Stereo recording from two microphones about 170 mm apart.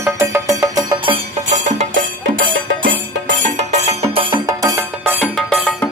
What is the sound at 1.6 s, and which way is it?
Music, 45° right (ahead or behind).